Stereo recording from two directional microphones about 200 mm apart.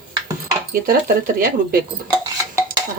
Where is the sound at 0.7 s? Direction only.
45° right (ahead or behind).